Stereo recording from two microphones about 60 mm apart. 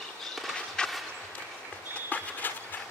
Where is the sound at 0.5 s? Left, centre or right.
Centre.